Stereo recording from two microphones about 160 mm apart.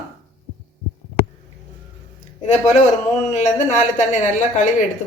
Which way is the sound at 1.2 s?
85° right.